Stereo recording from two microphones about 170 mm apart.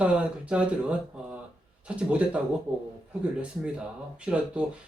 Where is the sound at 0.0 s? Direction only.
5° right (ahead or behind).